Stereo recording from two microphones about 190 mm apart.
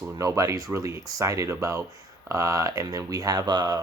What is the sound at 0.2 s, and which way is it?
Speech, 15° right (ahead or behind).